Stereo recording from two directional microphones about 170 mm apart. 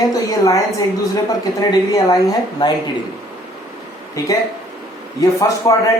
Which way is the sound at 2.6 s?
25° left (ahead or behind).